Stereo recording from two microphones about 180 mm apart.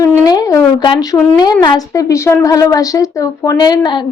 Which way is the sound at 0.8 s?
20° left (ahead or behind).